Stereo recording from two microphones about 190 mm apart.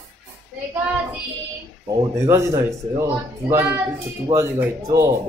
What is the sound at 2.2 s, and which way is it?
A man's voice, 15° right (ahead or behind).